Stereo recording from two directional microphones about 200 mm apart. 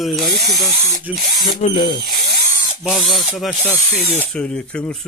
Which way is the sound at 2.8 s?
Centre (ahead or behind).